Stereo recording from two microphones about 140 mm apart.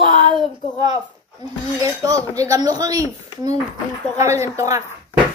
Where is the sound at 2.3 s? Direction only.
25° right (ahead or behind).